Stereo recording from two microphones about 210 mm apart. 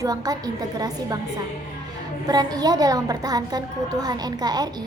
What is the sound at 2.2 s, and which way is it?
A woman's voice, 20° right (ahead or behind).